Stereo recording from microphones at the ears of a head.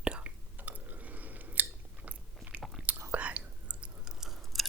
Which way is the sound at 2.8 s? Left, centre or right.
Right.